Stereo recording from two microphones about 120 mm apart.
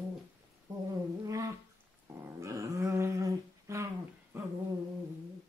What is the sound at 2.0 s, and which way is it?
Dog, 25° right (ahead or behind).